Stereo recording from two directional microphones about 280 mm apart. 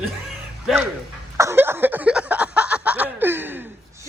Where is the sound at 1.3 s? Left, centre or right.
Centre.